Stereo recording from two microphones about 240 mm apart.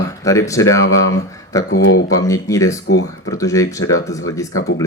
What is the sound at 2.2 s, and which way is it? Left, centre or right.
Speech, centre.